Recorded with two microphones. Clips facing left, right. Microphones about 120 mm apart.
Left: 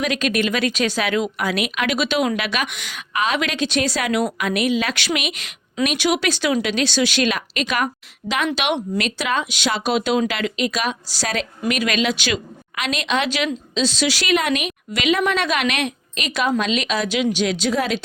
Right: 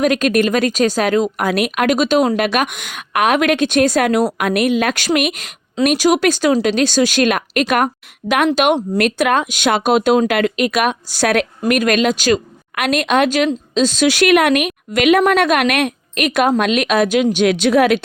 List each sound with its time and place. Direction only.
0.0 s speech: 45° right (ahead or behind)
12.7 s speech: 55° right (ahead or behind)